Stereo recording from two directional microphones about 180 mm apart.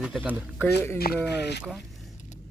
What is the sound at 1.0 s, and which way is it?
Speech, 70° left (ahead or behind).